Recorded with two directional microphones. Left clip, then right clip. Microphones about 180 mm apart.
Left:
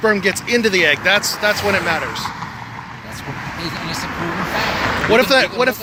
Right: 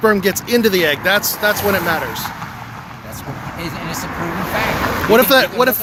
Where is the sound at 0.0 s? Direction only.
30° right (ahead or behind).